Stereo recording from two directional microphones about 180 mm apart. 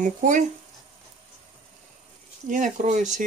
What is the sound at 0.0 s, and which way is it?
Speech, 45° right (ahead or behind).